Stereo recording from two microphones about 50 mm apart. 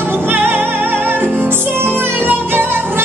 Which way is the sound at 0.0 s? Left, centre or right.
Right.